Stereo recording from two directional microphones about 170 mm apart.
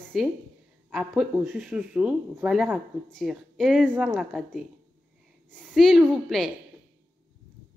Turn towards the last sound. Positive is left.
turn(degrees=0)  # may be behind; listen again after turning